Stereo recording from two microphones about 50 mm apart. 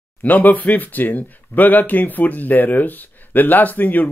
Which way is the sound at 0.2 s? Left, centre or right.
Left.